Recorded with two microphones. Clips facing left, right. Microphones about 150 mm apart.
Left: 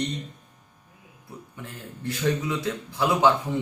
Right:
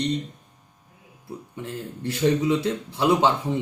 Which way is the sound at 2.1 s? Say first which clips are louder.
Right 5 dB; 25° right (ahead or behind).